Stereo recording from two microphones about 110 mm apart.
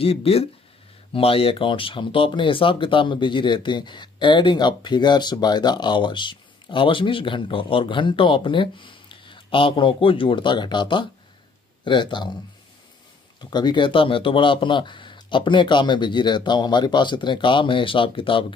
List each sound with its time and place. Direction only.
0.0 s speech: 60° left (ahead or behind); by 12.4 s 45° left (ahead or behind)
13.4 s speech: 40° left (ahead or behind)